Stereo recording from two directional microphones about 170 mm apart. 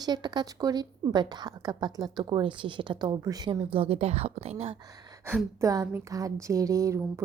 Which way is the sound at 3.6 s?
35° right (ahead or behind).